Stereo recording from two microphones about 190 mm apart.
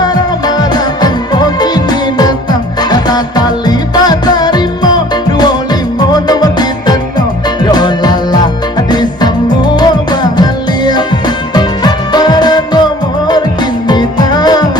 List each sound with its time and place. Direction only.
0.0 s music: 20° left (ahead or behind)
6.1 s music: 20° left (ahead or behind)